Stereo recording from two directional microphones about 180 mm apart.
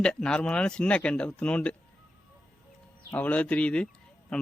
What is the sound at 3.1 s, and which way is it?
Speech, 10° left (ahead or behind).